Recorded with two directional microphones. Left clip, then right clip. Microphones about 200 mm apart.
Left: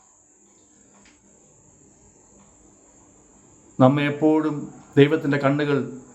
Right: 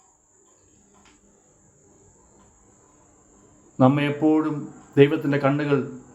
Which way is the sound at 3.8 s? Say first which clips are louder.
Left 2 dB; 15° left (ahead or behind).